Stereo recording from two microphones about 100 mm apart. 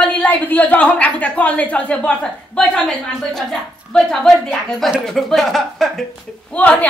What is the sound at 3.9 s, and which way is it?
Speech, 5° left (ahead or behind).